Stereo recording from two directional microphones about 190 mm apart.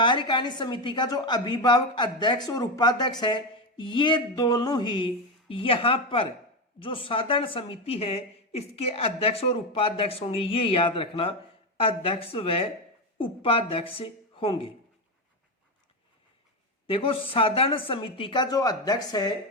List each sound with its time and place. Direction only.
0.0 s a woman's voice: 25° left (ahead or behind)
16.8 s a woman's voice: 30° left (ahead or behind)